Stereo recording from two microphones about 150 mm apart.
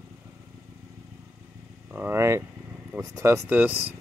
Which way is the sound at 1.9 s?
15° right (ahead or behind).